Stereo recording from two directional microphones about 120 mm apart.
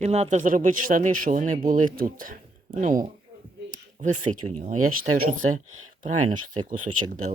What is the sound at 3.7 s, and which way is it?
Speech, 90° right.